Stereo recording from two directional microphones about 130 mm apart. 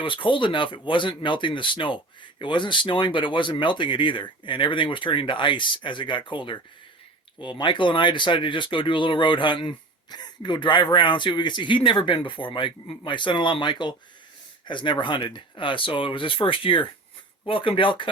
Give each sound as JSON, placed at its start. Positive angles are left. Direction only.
{"t": 0.0, "sound": "speech", "side_deg": 40}